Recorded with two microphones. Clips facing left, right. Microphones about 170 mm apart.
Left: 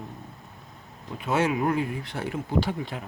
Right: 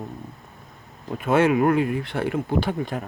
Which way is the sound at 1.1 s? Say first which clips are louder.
Right 6 dB; 55° right (ahead or behind).